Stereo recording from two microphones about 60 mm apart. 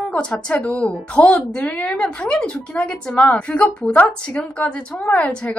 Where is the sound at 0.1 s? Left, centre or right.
Centre.